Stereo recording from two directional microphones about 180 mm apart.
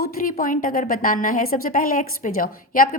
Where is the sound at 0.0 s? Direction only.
50° left (ahead or behind).